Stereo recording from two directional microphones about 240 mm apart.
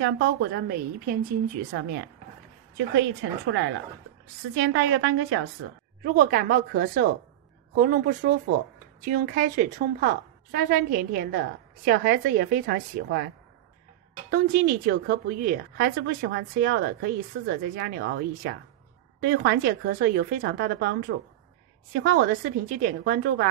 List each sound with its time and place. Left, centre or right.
0.0 s a woman's voice: right
1.7 s a woman's voice: right
6.0 s a woman's voice: right
14.3 s a woman's voice: right